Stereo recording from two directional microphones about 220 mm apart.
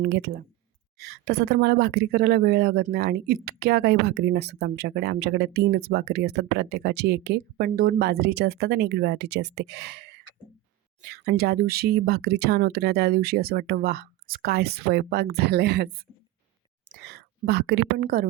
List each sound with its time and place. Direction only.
0.0 s a woman's voice: 50° right (ahead or behind)